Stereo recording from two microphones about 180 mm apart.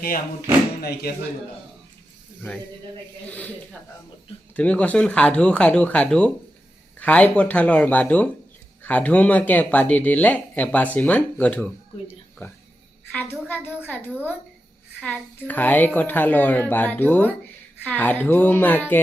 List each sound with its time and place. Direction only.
0.8 s speech: 60° left (ahead or behind)
4.5 s a woman's voice: 5° left (ahead or behind)
15.0 s a woman's voice: 10° left (ahead or behind)